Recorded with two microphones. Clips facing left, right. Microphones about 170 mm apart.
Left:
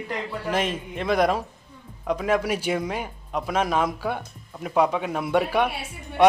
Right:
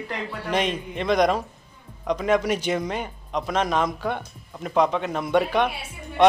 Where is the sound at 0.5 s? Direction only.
5° left (ahead or behind).